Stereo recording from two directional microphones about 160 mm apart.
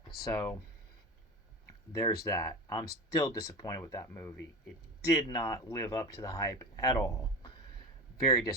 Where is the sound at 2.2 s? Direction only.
20° left (ahead or behind).